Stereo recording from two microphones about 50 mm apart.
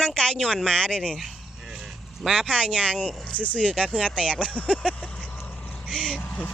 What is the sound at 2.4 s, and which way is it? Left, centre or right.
Speech, left.